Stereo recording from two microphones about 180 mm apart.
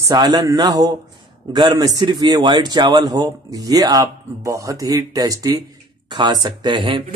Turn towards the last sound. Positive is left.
turn(degrees=-30)  # may be behind; listen again after turning